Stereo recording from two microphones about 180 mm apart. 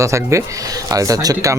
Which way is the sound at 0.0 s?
15° right (ahead or behind).